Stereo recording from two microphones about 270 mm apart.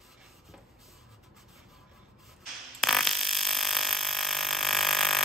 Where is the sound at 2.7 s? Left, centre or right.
Centre.